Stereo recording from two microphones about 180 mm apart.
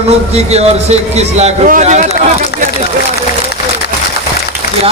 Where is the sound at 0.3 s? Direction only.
35° right (ahead or behind).